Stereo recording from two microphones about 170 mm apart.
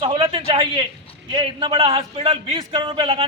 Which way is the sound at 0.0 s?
30° right (ahead or behind).